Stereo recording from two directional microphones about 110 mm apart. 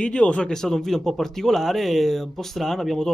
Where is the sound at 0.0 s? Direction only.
10° left (ahead or behind).